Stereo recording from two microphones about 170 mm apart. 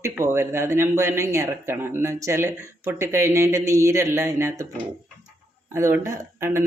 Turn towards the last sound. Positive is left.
turn(degrees=-15)  # may be behind; listen again after turning